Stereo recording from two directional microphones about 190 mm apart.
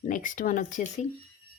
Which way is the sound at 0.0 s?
45° left (ahead or behind).